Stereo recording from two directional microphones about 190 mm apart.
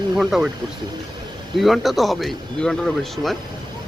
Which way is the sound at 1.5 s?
Centre (ahead or behind).